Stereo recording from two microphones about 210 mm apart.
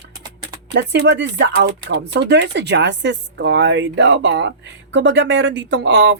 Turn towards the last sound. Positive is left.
turn(degrees=-50)  # may be behind; listen again after turning